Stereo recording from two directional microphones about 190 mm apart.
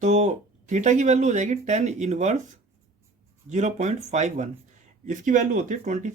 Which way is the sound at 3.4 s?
40° right (ahead or behind).